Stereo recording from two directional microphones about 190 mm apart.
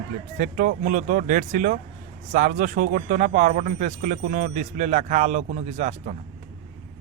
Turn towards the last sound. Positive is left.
turn(degrees=-35)  # may be behind; listen again after turning